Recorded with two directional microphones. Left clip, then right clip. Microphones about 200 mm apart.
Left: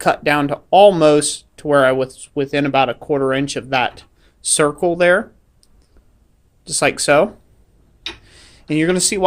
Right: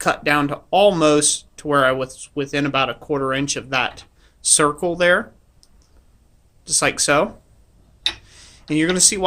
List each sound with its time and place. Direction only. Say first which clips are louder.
0.0 s speech: left 2 dB; 25° left (ahead or behind)
6.7 s speech: left 3 dB; 25° left (ahead or behind)
8.0 s tick-tock: right 6 dB; 25° left (ahead or behind)